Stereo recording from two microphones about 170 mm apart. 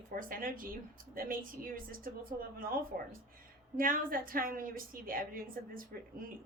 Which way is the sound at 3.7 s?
55° right (ahead or behind).